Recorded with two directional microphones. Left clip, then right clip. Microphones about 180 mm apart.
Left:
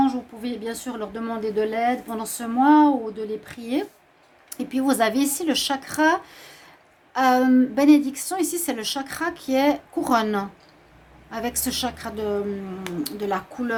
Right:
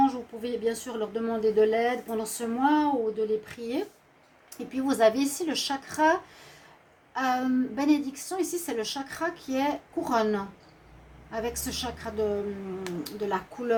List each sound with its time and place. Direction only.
0.6 s speech: 50° left (ahead or behind)
4.4 s a woman's voice: 60° left (ahead or behind)